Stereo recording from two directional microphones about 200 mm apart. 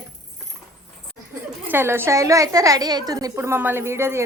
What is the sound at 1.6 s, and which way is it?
A woman's voice, 10° right (ahead or behind).